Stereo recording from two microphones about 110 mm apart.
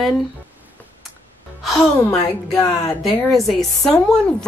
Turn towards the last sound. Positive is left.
turn(degrees=5)  # may be behind; listen again after turning